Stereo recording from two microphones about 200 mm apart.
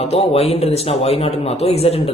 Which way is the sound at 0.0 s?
30° left (ahead or behind).